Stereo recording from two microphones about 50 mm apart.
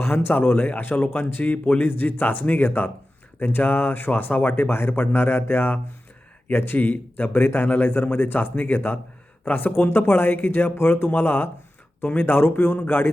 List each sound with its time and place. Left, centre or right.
0.0 s a man's voice: left
1.5 s speech: left